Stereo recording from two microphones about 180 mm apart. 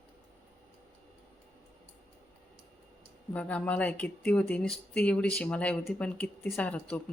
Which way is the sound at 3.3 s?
5° left (ahead or behind).